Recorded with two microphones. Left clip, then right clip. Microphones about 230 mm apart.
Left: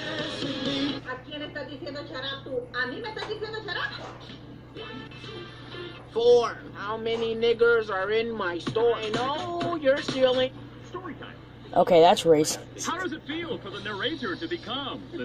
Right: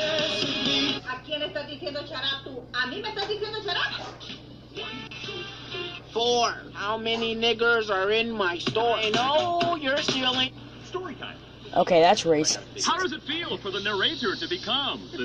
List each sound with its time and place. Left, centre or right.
0.0 s music: right
11.9 s speech: centre
12.8 s speech: right